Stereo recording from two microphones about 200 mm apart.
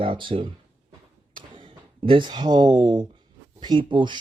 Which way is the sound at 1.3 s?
25° right (ahead or behind).